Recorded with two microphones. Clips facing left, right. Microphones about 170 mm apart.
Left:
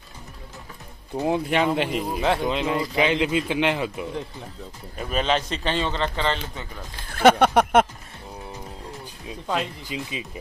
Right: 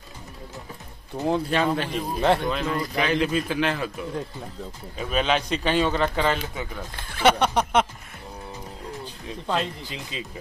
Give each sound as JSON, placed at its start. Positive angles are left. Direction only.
{"t": 1.1, "sound": "a man's voice", "side_deg": 15}
{"t": 5.1, "sound": "a man's voice", "side_deg": -5}
{"t": 7.1, "sound": "speech", "side_deg": 50}
{"t": 9.5, "sound": "speech", "side_deg": 15}